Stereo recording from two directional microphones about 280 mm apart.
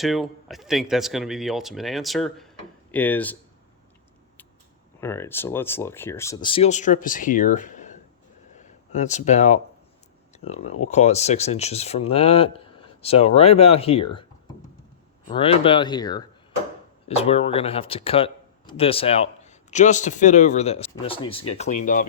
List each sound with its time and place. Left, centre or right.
0.0 s speech: centre
4.9 s speech: centre
15.3 s speech: centre